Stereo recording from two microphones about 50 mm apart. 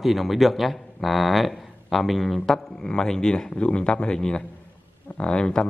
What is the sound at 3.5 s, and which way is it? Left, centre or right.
Speech, left.